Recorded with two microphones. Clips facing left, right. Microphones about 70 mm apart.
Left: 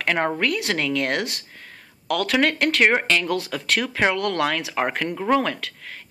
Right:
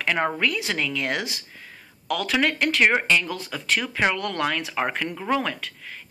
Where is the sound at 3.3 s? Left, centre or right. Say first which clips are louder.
Left 3 dB; left.